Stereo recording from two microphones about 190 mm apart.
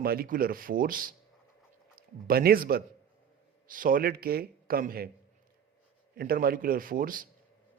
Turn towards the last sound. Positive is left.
turn(degrees=-45)  # may be behind; listen again after turning